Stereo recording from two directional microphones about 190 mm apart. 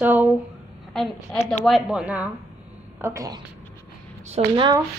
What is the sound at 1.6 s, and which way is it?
Speech, centre (ahead or behind).